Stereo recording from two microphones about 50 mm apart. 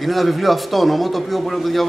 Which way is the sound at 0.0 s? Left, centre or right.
Centre.